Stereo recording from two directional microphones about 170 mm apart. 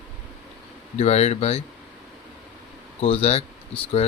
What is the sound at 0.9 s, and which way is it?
Speech, 40° left (ahead or behind).